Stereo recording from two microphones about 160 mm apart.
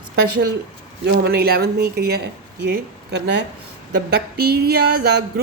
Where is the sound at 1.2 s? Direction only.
90° right.